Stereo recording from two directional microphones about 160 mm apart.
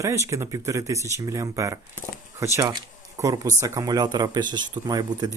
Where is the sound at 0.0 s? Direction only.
20° right (ahead or behind).